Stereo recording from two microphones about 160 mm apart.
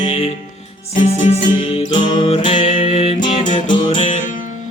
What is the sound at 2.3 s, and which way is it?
Music, 35° left (ahead or behind).